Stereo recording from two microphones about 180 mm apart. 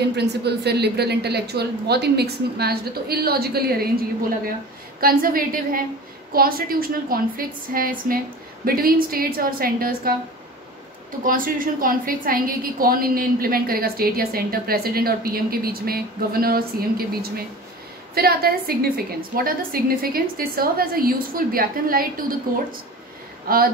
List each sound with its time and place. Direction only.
0.1 s a woman's voice: 70° right (ahead or behind)
5.0 s a woman's voice: 55° right (ahead or behind)
11.2 s a woman's voice: 50° right (ahead or behind)
23.5 s a woman's voice: 55° right (ahead or behind)